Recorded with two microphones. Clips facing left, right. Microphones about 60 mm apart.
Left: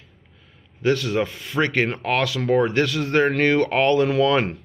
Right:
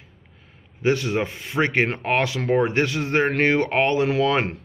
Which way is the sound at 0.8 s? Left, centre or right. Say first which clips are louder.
Left 1 dB; right.